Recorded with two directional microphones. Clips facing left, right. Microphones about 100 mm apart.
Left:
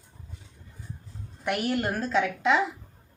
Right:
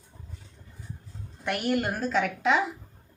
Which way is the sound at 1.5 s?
Centre (ahead or behind).